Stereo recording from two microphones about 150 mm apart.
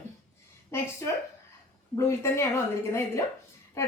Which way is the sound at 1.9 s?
20° left (ahead or behind).